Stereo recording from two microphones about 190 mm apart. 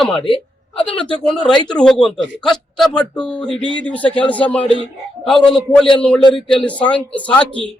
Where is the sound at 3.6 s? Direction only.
25° right (ahead or behind).